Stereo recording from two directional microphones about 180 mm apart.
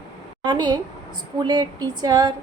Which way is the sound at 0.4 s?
25° right (ahead or behind).